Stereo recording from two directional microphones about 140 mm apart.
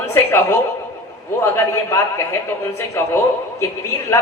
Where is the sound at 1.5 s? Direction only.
20° left (ahead or behind).